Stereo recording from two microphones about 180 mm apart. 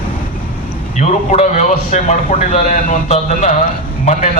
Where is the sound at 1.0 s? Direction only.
40° left (ahead or behind).